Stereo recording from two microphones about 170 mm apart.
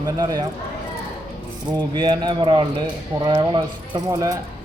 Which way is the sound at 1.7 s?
25° right (ahead or behind).